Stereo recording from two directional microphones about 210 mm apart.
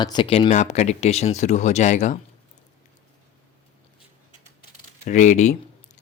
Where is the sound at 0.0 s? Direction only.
20° left (ahead or behind).